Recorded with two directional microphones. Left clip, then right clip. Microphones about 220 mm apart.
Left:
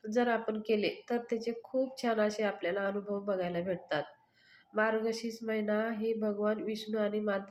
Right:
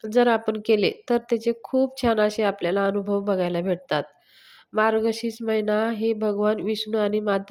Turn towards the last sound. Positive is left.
turn(degrees=-45)  # may be behind; listen again after turning